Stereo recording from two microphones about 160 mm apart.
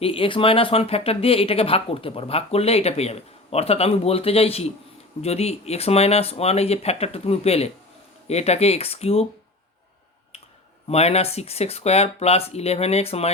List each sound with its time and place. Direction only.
0.0 s speech: 35° left (ahead or behind)
10.8 s speech: 40° left (ahead or behind)